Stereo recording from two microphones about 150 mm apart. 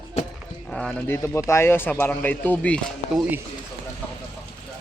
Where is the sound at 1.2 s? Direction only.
20° left (ahead or behind).